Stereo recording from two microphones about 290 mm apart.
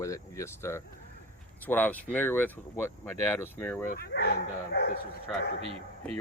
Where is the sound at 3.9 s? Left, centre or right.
Left.